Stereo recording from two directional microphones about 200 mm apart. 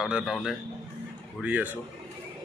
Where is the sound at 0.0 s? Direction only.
5° right (ahead or behind).